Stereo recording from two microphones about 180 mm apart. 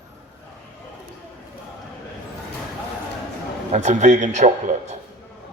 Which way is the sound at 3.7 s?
40° right (ahead or behind).